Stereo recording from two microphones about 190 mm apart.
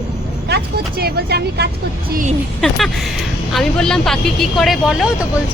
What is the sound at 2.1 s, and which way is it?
Speech, 45° right (ahead or behind).